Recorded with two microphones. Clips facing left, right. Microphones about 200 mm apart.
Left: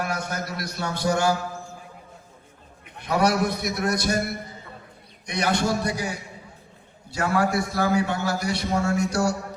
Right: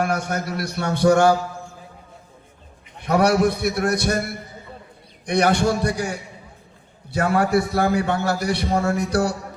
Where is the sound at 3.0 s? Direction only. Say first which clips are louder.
Right 4 dB; 60° right (ahead or behind).